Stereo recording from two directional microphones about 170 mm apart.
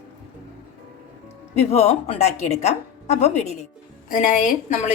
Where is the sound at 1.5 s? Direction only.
40° left (ahead or behind).